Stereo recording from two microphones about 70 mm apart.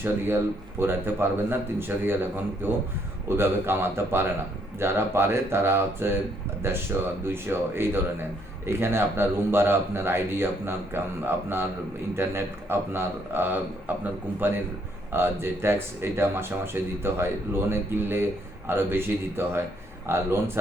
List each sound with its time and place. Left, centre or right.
0.0 s speech: right